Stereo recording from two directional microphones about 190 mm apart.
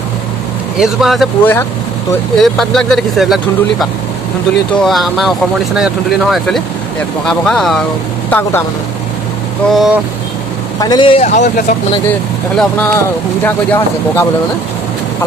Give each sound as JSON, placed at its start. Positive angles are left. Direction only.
{"t": 0.7, "sound": "speech", "side_deg": 0}
{"t": 1.4, "sound": "speech", "side_deg": 10}
{"t": 9.7, "sound": "speech", "side_deg": 0}
{"t": 10.8, "sound": "a man's voice", "side_deg": 25}
{"t": 11.2, "sound": "speech", "side_deg": 40}
{"t": 12.5, "sound": "speech", "side_deg": 10}